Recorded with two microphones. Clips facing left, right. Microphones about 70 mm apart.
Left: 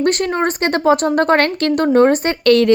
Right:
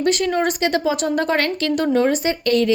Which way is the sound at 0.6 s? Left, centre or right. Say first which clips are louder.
Left 5 dB; left.